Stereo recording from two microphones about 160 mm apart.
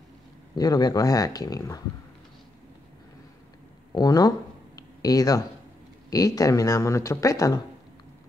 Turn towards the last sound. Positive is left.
turn(degrees=20)  # may be behind; listen again after turning